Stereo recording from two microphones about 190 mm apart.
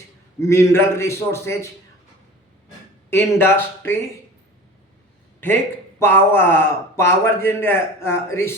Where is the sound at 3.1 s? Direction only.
10° left (ahead or behind).